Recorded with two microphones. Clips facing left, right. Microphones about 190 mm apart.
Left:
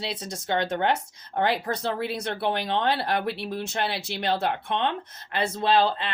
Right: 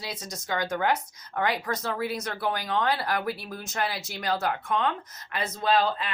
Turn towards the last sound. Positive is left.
turn(degrees=30)  # may be behind; listen again after turning